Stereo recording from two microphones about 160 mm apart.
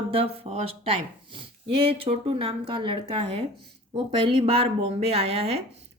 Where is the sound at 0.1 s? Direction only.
40° right (ahead or behind).